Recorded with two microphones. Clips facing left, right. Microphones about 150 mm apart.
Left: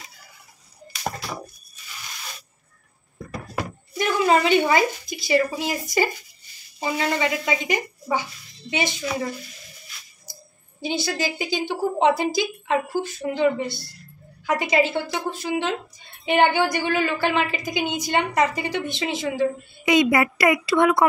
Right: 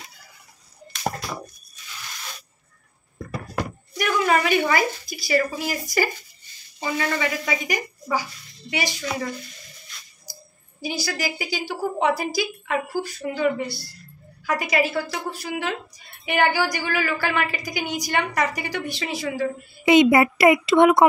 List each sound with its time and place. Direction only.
3.2 s knock: centre (ahead or behind)
4.0 s a woman's voice: 25° left (ahead or behind)
10.8 s a woman's voice: 25° left (ahead or behind)
19.8 s a woman's voice: 25° right (ahead or behind)